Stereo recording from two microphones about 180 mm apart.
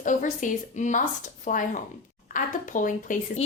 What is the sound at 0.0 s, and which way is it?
A woman's voice, 45° left (ahead or behind).